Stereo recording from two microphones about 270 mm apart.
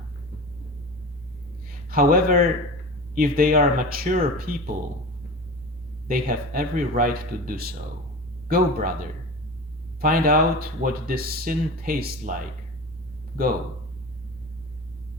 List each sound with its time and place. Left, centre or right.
1.6 s speech: right
6.1 s speech: right
10.0 s speech: right